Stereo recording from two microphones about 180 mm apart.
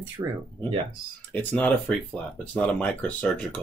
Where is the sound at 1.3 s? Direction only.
10° left (ahead or behind).